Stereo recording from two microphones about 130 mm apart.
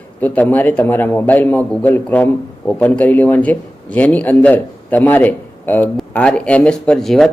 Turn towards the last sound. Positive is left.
turn(degrees=5)  # may be behind; listen again after turning